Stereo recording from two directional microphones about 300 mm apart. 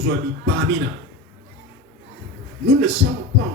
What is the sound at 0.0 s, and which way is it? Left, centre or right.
Speech, right.